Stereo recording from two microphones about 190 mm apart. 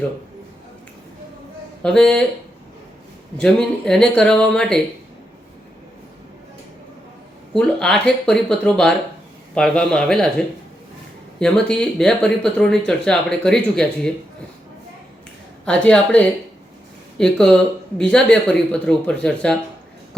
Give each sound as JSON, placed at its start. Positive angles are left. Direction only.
{"t": 1.8, "sound": "speech", "side_deg": 5}
{"t": 3.3, "sound": "speech", "side_deg": 5}
{"t": 7.5, "sound": "speech", "side_deg": 5}
{"t": 15.6, "sound": "speech", "side_deg": 5}